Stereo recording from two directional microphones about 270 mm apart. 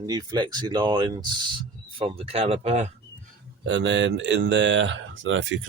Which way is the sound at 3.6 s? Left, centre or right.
Right.